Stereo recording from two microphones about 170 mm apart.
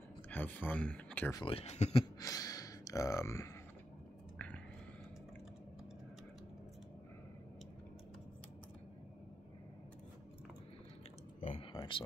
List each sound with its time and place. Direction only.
0.3 s speech: 10° left (ahead or behind)
1.4 s speech: 35° left (ahead or behind)
2.1 s speech: 20° left (ahead or behind)
11.4 s a sound: 35° left (ahead or behind)